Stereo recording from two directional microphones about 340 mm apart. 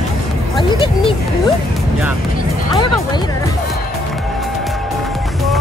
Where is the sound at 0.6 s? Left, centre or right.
Centre.